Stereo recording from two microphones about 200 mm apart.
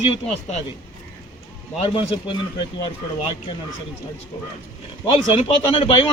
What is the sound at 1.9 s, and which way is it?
A man's voice, 25° left (ahead or behind).